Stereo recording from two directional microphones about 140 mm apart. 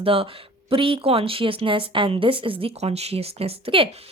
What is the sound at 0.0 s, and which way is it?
Speech, 40° right (ahead or behind).